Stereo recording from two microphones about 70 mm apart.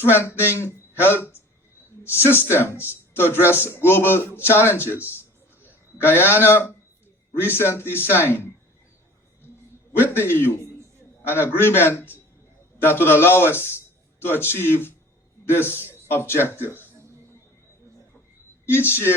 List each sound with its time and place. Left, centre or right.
0.0 s a man's voice: left
10.0 s a man's voice: left
18.6 s a man's voice: left